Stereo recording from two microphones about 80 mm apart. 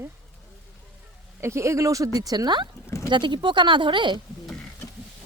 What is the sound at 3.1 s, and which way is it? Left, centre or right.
Speech, right.